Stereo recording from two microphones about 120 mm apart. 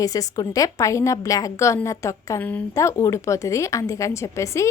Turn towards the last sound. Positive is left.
turn(degrees=25)  # may be behind; listen again after turning